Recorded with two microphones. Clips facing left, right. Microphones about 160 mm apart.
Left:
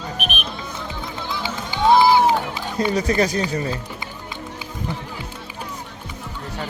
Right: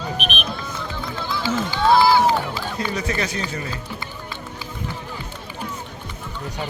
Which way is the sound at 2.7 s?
35° left (ahead or behind).